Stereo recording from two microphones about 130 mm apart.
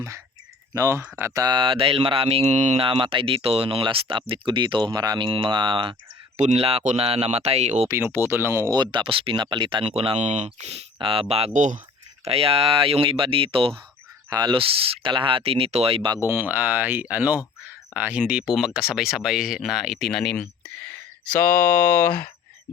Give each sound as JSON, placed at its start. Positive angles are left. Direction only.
{"t": 0.7, "sound": "speech", "side_deg": -25}
{"t": 1.3, "sound": "speech", "side_deg": -30}
{"t": 2.7, "sound": "speech", "side_deg": -45}
{"t": 6.3, "sound": "speech", "side_deg": -60}
{"t": 7.9, "sound": "speech", "side_deg": -15}
{"t": 10.9, "sound": "speech", "side_deg": -45}
{"t": 12.2, "sound": "speech", "side_deg": -50}
{"t": 14.3, "sound": "speech", "side_deg": -35}
{"t": 16.0, "sound": "speech", "side_deg": -30}
{"t": 16.3, "sound": "speech", "side_deg": -15}